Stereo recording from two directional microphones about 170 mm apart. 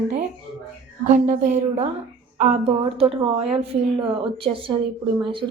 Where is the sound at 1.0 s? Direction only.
50° right (ahead or behind).